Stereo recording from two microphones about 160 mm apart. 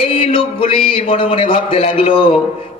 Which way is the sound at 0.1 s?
35° left (ahead or behind).